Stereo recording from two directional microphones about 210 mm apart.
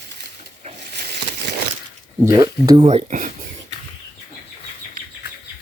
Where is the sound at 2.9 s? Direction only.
35° right (ahead or behind).